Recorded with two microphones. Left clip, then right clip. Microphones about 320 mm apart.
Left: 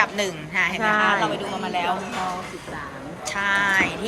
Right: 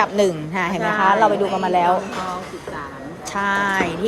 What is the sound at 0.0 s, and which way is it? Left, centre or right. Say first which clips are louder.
Speech: right 5 dB; centre.